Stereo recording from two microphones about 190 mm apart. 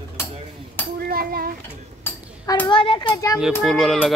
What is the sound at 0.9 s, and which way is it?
Speech, 50° right (ahead or behind).